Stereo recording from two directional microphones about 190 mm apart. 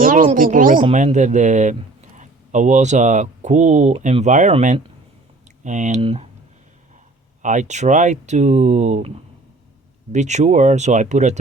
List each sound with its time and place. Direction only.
0.0 s speech: 45° right (ahead or behind)
6.0 s speech: 30° right (ahead or behind)
7.4 s speech: 40° right (ahead or behind)